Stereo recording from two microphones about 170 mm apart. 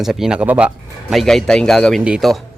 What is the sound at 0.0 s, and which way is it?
Speech, centre (ahead or behind).